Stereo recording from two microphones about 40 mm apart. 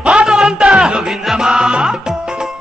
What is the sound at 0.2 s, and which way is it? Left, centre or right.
Music, centre.